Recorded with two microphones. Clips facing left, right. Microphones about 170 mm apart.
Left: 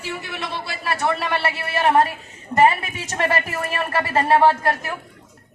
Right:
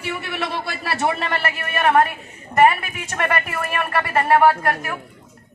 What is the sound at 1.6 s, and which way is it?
A woman's voice, 30° left (ahead or behind).